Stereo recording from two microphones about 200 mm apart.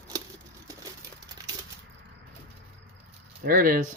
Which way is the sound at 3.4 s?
45° right (ahead or behind).